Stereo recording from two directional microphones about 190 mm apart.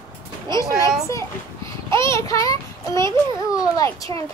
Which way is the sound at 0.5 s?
15° left (ahead or behind).